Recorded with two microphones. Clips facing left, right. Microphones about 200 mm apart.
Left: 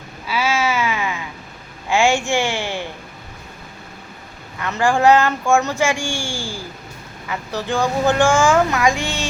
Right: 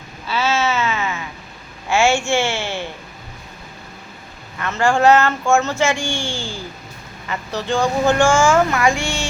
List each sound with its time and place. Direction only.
0.3 s a sound: 10° left (ahead or behind)
1.9 s a woman's voice: 15° left (ahead or behind)
4.6 s speech: 15° left (ahead or behind)
7.7 s speech: 15° right (ahead or behind)
8.2 s speech: 15° left (ahead or behind)
9.0 s speech: 15° right (ahead or behind)